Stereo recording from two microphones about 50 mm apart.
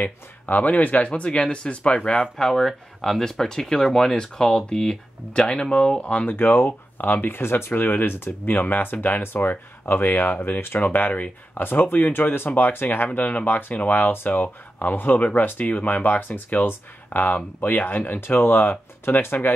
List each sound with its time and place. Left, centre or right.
0.0 s speech: left
2.3 s speech: centre; by 6.3 s left
6.3 s speech: left